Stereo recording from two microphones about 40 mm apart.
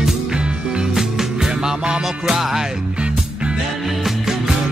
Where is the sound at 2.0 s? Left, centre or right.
Centre.